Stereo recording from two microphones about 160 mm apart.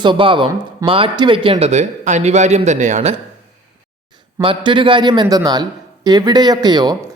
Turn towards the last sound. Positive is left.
turn(degrees=-25)  # may be behind; listen again after turning